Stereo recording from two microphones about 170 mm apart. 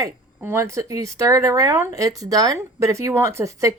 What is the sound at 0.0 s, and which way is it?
Speech, 15° right (ahead or behind).